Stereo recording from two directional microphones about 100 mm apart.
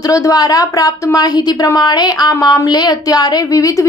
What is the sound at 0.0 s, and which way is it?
A woman's voice, 35° left (ahead or behind).